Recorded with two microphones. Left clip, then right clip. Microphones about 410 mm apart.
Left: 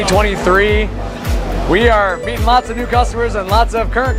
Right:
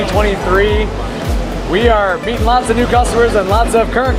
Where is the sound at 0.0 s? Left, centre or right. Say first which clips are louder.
Left 1 dB; left.